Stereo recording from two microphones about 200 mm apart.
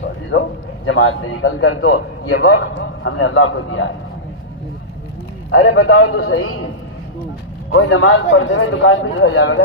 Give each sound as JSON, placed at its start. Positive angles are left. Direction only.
{"t": 0.3, "sound": "a man's voice", "side_deg": 65}
{"t": 5.5, "sound": "a man's voice", "side_deg": 75}
{"t": 7.7, "sound": "a man's voice", "side_deg": 70}